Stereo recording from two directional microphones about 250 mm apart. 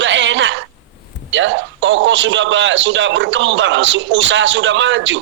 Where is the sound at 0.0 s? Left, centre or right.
Right.